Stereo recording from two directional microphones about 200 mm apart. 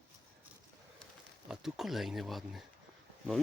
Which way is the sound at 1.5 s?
Centre (ahead or behind).